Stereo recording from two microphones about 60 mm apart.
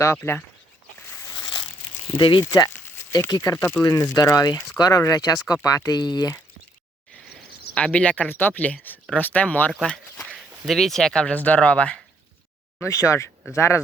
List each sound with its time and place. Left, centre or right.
0.2 s speech: left
2.4 s speech: left
3.2 s speech: left
3.9 s speech: left
5.6 s speech: left
7.8 s speech: centre
8.3 s speech: left
10.7 s speech: centre
11.1 s speech: centre
12.8 s speech: left